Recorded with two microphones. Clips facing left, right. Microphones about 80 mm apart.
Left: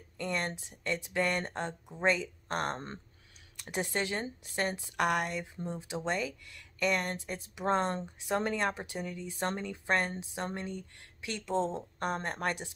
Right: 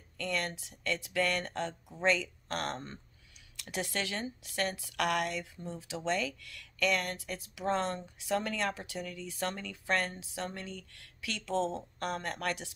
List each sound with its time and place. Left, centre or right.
0.2 s a woman's voice: left